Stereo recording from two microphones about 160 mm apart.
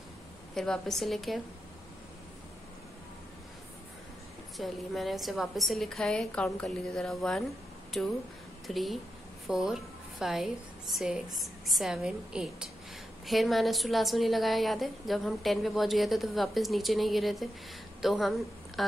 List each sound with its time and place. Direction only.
0.6 s a woman's voice: 5° left (ahead or behind)
4.6 s a woman's voice: centre (ahead or behind)